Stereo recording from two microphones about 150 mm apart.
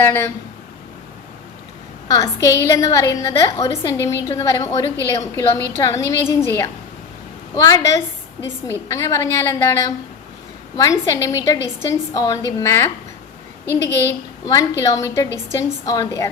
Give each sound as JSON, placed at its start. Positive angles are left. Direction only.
{"t": 0.0, "sound": "speech", "side_deg": 15}
{"t": 2.0, "sound": "a woman's voice", "side_deg": 20}